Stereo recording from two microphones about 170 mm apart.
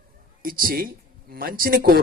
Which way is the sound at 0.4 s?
60° right (ahead or behind).